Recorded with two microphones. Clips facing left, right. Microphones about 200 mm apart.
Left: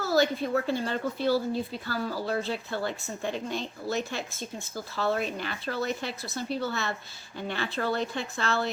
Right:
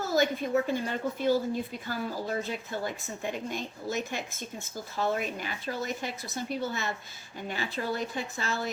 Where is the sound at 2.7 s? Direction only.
15° right (ahead or behind).